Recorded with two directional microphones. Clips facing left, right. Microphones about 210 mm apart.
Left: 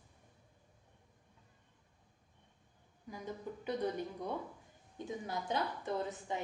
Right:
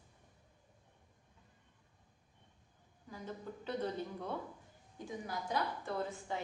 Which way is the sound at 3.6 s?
15° left (ahead or behind).